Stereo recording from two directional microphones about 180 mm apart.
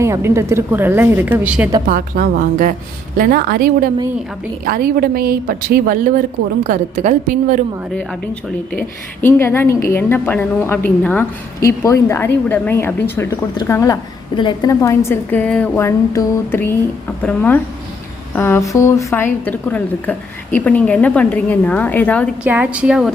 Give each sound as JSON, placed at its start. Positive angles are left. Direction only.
{"t": 0.0, "sound": "a woman's voice", "side_deg": -15}
{"t": 1.9, "sound": "a woman's voice", "side_deg": -50}
{"t": 9.2, "sound": "a woman's voice", "side_deg": 15}
{"t": 22.4, "sound": "a woman's voice", "side_deg": -5}